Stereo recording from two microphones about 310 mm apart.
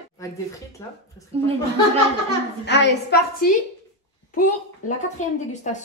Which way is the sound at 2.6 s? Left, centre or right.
Left.